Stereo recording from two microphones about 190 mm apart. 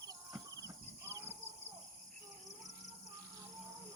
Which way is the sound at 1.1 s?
15° right (ahead or behind).